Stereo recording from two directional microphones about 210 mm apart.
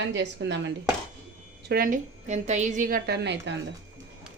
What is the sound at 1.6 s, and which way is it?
A woman's voice, 45° right (ahead or behind).